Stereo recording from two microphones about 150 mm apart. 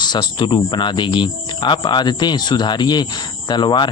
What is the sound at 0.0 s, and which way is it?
A man's voice, 30° left (ahead or behind).